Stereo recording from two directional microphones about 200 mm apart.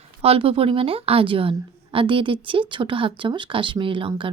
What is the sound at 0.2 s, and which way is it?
A woman's voice, 30° right (ahead or behind).